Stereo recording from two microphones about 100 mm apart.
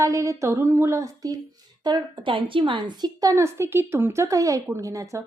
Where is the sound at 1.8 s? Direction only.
45° right (ahead or behind).